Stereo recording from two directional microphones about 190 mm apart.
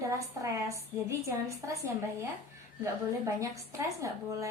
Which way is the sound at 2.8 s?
15° right (ahead or behind).